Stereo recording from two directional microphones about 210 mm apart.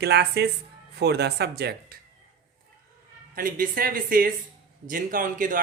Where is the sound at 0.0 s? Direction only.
50° right (ahead or behind).